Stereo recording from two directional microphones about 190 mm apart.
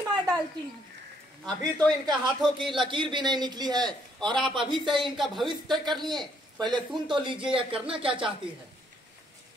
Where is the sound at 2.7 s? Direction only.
25° right (ahead or behind).